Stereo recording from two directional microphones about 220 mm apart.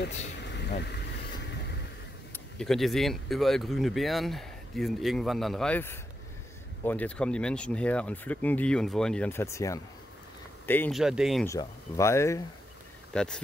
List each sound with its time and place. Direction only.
0.4 s vehicle: 50° left (ahead or behind)
2.3 s speech: centre (ahead or behind)
11.0 s speech: centre (ahead or behind)
11.4 s speech: 15° left (ahead or behind)